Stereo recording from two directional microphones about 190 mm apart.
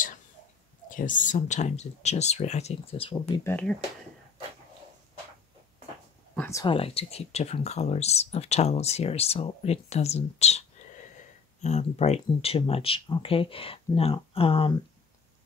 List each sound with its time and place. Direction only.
0.8 s speech: 45° left (ahead or behind); by 3.4 s 30° left (ahead or behind)
3.4 s speech: 10° left (ahead or behind)
6.3 s a sound: 10° left (ahead or behind)
6.6 s speech: 30° left (ahead or behind)